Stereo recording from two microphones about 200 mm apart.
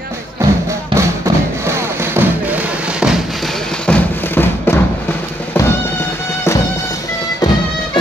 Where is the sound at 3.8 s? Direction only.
10° left (ahead or behind).